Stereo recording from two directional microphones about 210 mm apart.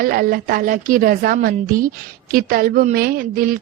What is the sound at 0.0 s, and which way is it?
A woman's voice, 45° right (ahead or behind).